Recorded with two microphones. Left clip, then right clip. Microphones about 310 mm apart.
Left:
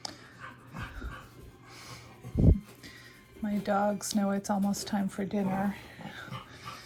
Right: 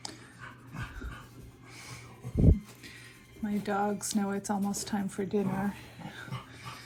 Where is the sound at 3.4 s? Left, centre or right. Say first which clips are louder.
Left 2 dB; centre.